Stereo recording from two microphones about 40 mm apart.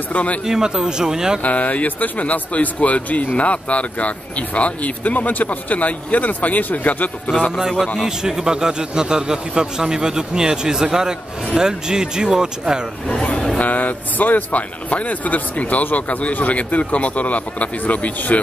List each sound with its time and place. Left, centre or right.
0.1 s speech: left
0.5 s a man's voice: centre
1.4 s speech: left
8.0 s a man's voice: centre
13.0 s speech: left
13.6 s speech: left